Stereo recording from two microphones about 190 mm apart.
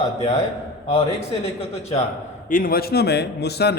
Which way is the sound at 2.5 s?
45° left (ahead or behind).